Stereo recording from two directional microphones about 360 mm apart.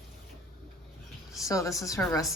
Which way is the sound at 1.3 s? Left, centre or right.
Centre.